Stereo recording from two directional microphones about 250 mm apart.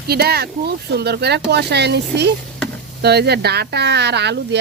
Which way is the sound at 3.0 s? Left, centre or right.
Right.